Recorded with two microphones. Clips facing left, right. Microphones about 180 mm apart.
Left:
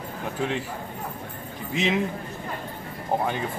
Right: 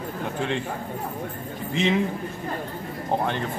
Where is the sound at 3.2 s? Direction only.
5° left (ahead or behind).